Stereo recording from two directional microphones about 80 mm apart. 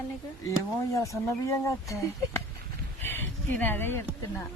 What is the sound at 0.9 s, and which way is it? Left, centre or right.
Speech, left.